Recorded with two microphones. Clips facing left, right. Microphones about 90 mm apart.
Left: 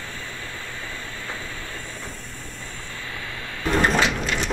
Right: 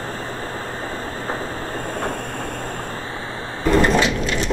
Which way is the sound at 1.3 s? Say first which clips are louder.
Right 9 dB; 50° right (ahead or behind).